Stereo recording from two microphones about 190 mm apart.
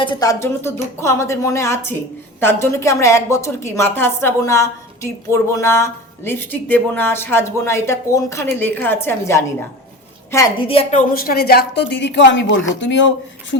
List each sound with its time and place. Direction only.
0.0 s a woman's voice: 20° left (ahead or behind)
10.6 s a woman's voice: 30° left (ahead or behind)
11.1 s speech: 50° left (ahead or behind); by 13.6 s 70° left (ahead or behind)